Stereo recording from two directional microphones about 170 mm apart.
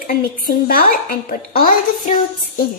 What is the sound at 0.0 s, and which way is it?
A woman's voice, 55° left (ahead or behind).